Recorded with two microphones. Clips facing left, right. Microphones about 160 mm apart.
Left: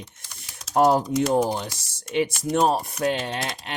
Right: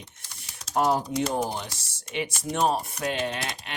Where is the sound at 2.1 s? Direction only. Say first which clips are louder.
Left 7 dB; 40° left (ahead or behind).